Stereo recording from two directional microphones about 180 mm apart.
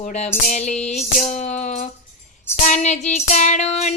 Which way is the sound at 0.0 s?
40° left (ahead or behind).